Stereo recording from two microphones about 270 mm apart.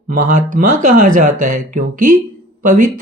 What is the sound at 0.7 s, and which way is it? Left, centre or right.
Speech, right.